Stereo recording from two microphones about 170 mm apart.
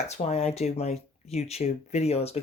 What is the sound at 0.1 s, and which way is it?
Speech, 40° left (ahead or behind).